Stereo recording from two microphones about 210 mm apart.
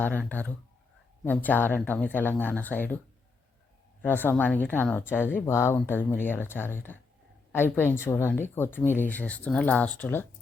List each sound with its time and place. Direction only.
0.0 s a woman's voice: 10° left (ahead or behind)
4.0 s a woman's voice: 10° left (ahead or behind)